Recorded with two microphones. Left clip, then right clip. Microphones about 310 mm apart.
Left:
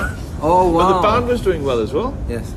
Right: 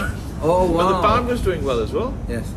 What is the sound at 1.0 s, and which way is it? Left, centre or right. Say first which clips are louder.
Speech: left 3 dB; left.